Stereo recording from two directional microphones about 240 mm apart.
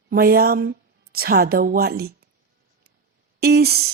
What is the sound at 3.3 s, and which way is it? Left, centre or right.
Speech, right.